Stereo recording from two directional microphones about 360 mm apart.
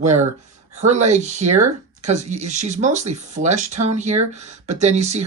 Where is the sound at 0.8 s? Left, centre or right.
Centre.